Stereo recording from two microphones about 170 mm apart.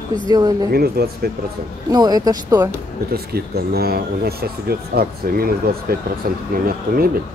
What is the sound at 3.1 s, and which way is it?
Speech, 65° right (ahead or behind).